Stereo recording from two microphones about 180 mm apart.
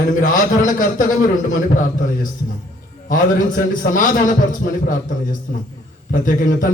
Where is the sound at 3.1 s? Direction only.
50° left (ahead or behind).